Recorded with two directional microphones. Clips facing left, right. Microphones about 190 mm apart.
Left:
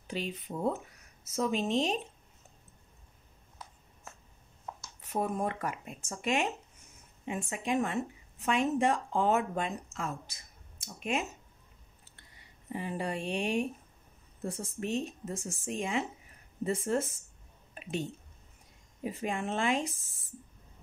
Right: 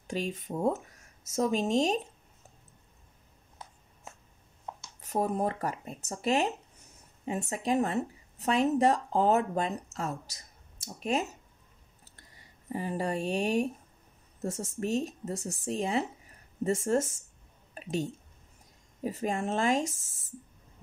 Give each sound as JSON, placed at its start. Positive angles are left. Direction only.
{"t": 0.0, "sound": "speech", "side_deg": -45}
{"t": 5.0, "sound": "speech", "side_deg": -40}
{"t": 12.0, "sound": "a sound", "side_deg": -40}
{"t": 14.4, "sound": "speech", "side_deg": -45}
{"t": 17.8, "sound": "a sound", "side_deg": -40}
{"t": 19.0, "sound": "speech", "side_deg": -40}